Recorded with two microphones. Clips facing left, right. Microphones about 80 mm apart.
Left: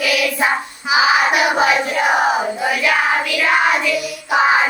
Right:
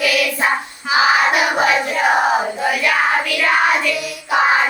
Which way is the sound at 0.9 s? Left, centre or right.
Centre.